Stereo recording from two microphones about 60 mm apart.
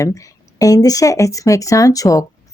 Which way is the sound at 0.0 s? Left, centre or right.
Left.